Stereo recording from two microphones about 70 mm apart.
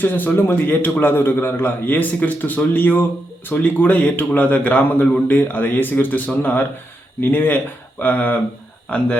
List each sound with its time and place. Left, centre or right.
0.0 s a man's voice: left